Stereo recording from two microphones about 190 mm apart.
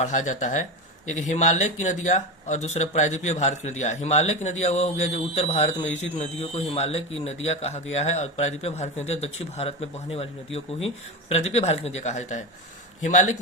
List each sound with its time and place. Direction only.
0.2 s speech: 40° left (ahead or behind)